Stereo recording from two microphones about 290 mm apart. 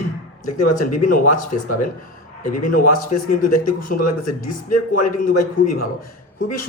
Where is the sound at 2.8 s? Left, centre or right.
Left.